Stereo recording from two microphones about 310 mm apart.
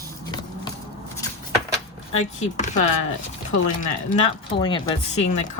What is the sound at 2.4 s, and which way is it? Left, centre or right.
Speech, left.